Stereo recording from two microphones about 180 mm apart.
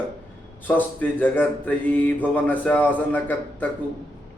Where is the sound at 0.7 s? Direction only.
10° left (ahead or behind).